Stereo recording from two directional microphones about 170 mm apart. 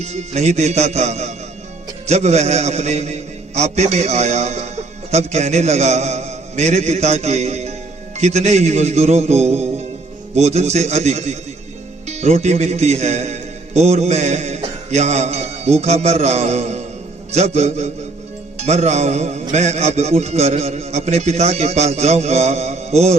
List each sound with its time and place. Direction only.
0.0 s a man's voice: 40° right (ahead or behind)